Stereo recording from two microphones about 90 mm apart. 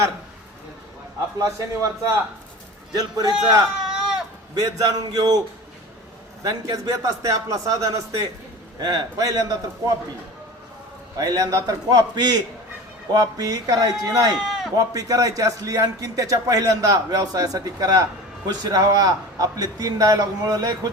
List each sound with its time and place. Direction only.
1.4 s a man's voice: 40° right (ahead or behind)
2.9 s a man's voice: 45° right (ahead or behind)
3.8 s baby cry: 5° right (ahead or behind)
4.5 s a man's voice: 45° right (ahead or behind)
6.4 s a man's voice: 45° right (ahead or behind)
11.2 s a man's voice: 45° right (ahead or behind)
14.3 s a sound: 5° right (ahead or behind)
14.8 s a man's voice: 40° right (ahead or behind)